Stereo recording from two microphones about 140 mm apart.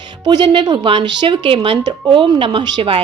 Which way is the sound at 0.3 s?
30° right (ahead or behind).